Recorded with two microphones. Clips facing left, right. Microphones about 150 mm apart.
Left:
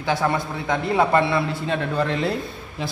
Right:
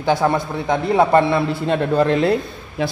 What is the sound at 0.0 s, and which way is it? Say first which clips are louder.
A man's voice: right 5 dB; 25° right (ahead or behind).